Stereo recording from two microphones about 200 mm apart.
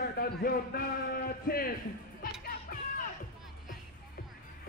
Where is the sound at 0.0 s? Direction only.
50° left (ahead or behind).